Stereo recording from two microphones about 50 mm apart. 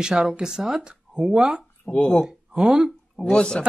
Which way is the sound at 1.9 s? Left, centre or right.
Left.